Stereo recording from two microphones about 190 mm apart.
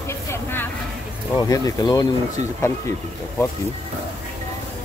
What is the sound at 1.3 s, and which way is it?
Speech, 20° left (ahead or behind).